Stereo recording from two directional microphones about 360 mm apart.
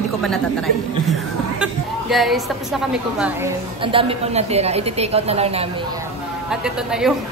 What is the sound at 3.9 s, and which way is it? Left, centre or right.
A woman's voice, centre.